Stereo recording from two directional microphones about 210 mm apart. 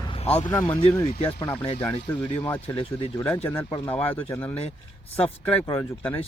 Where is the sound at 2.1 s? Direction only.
10° left (ahead or behind).